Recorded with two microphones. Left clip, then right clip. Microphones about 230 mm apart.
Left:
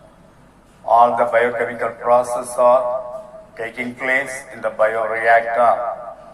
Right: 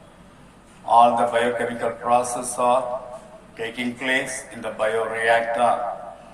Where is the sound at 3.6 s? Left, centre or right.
Left.